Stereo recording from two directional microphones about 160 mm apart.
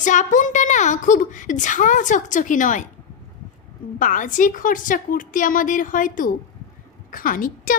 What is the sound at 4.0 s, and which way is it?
A woman's voice, 55° left (ahead or behind).